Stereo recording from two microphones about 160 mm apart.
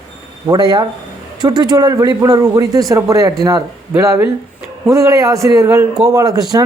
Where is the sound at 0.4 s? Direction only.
25° right (ahead or behind).